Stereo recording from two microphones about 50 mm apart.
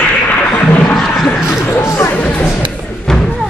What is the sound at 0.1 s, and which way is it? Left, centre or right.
Music, left.